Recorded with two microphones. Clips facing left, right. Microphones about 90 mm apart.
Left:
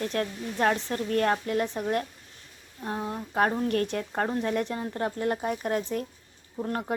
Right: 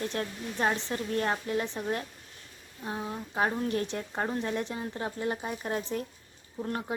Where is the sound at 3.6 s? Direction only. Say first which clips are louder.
Left 4 dB; 55° left (ahead or behind).